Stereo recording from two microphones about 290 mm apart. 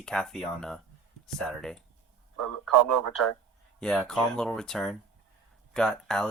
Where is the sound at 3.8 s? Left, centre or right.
Centre.